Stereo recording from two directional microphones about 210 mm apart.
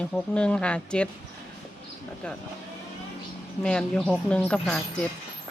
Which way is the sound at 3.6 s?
5° left (ahead or behind).